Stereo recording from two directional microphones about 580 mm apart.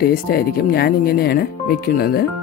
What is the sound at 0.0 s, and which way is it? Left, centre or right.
Speech, centre.